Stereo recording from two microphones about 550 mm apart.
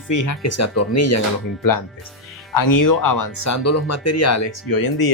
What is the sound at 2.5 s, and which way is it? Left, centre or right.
Speech, left.